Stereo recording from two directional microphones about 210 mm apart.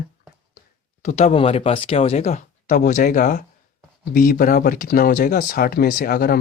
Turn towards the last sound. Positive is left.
turn(degrees=45)  # may be behind; listen again after turning